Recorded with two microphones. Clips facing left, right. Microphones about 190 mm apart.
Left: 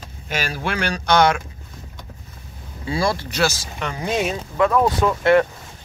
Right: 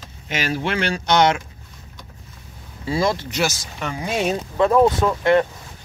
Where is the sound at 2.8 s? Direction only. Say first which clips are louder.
Right 1 dB; 20° right (ahead or behind).